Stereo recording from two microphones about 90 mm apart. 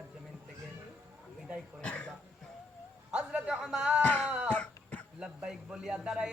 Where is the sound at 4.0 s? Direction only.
15° left (ahead or behind).